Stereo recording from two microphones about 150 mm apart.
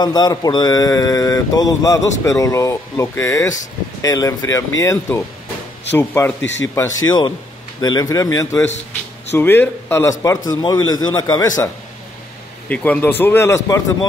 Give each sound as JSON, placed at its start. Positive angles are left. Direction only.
{"t": 0.0, "sound": "speech", "side_deg": 25}
{"t": 12.6, "sound": "speech", "side_deg": 10}